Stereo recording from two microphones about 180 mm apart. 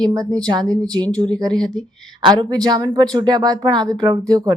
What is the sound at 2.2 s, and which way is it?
Speech, 20° right (ahead or behind).